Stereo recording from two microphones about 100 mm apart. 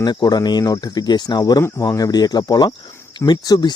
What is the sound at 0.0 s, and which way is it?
Speech, 45° left (ahead or behind).